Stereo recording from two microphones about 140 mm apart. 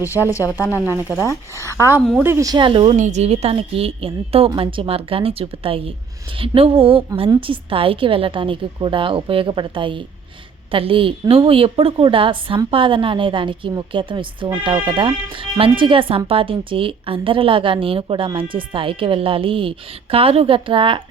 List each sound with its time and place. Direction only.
0.2 s speech: 20° left (ahead or behind)
1.5 s speech: 20° right (ahead or behind)
2.0 s speech: centre (ahead or behind)
2.2 s a woman's voice: 20° right (ahead or behind); by 2.9 s 35° right (ahead or behind)
2.9 s a woman's voice: 55° right (ahead or behind); by 21.0 s 35° right (ahead or behind)